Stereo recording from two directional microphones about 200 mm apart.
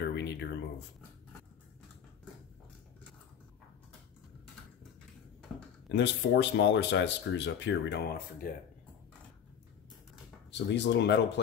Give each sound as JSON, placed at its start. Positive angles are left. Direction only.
{"t": 0.0, "sound": "a sound", "side_deg": 55}
{"t": 5.9, "sound": "speech", "side_deg": 60}
{"t": 10.5, "sound": "speech", "side_deg": 60}